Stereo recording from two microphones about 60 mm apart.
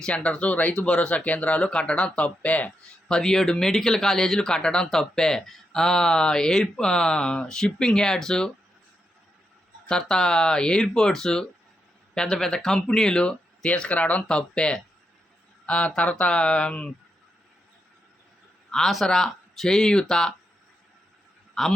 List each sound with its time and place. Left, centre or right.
0.0 s speech: centre
3.1 s speech: centre
9.9 s speech: centre
13.7 s speech: left
18.7 s speech: centre
21.6 s speech: centre